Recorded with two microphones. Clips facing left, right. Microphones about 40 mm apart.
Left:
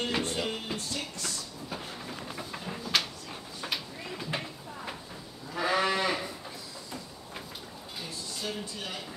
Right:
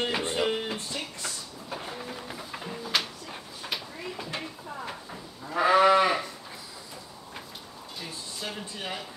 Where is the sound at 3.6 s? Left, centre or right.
Centre.